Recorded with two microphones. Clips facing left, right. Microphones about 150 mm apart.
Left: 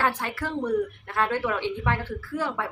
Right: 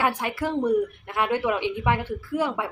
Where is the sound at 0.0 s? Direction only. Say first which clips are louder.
Right 2 dB; 15° right (ahead or behind).